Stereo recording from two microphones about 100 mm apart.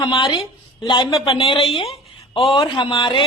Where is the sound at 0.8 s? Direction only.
50° left (ahead or behind).